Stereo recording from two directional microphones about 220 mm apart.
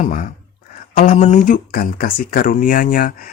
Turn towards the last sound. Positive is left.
turn(degrees=40)  # may be behind; listen again after turning